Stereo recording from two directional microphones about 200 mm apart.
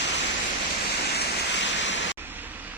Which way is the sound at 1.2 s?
65° left (ahead or behind).